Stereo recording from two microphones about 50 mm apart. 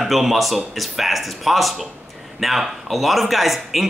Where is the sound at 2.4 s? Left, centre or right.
Centre.